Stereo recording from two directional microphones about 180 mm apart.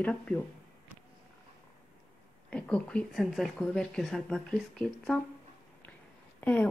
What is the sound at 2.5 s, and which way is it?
Speech, 5° left (ahead or behind).